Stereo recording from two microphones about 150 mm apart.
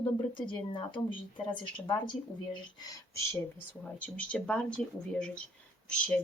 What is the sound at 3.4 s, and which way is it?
Speech, 10° left (ahead or behind).